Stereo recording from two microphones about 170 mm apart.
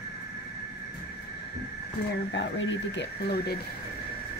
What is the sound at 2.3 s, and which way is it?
Speech, 90° left.